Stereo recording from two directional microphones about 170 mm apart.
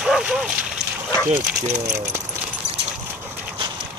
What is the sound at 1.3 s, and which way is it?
Speech, 45° right (ahead or behind).